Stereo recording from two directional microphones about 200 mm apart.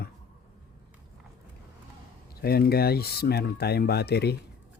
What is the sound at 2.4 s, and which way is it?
Speech, 50° left (ahead or behind).